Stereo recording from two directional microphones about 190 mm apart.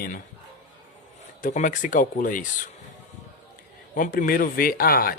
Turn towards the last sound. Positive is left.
turn(degrees=50)  # may be behind; listen again after turning